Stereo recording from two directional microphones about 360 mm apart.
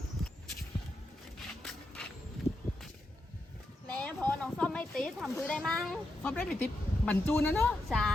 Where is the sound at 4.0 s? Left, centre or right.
Centre.